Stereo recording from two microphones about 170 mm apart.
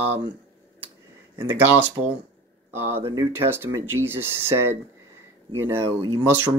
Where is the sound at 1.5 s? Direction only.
10° right (ahead or behind).